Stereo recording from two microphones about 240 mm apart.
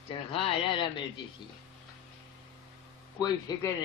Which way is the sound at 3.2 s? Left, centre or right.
Centre.